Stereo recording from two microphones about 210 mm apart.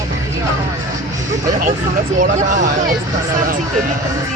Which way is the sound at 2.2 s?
40° right (ahead or behind).